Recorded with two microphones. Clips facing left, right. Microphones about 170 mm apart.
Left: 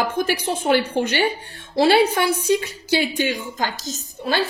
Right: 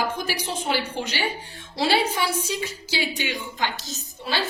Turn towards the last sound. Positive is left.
turn(degrees=45)  # may be behind; listen again after turning